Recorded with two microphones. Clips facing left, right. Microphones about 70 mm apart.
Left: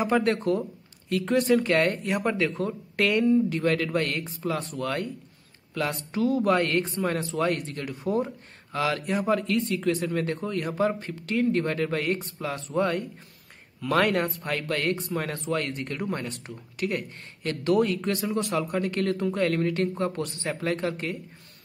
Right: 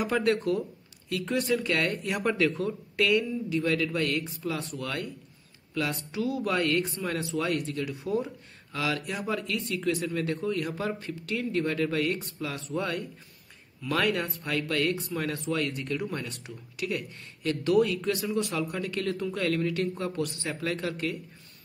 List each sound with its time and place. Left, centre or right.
0.0 s speech: left